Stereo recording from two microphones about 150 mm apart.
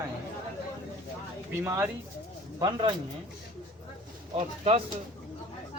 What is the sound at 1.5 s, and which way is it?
Speech, 15° right (ahead or behind).